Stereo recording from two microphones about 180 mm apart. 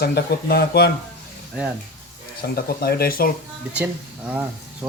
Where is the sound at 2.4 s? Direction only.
60° left (ahead or behind).